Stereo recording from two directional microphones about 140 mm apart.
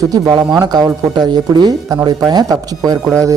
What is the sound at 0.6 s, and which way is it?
Speech, 30° right (ahead or behind).